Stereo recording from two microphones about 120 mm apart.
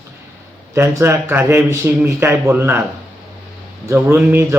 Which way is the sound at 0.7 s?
25° right (ahead or behind).